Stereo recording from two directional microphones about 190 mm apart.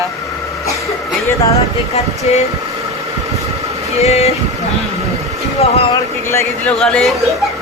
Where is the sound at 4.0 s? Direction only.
35° left (ahead or behind).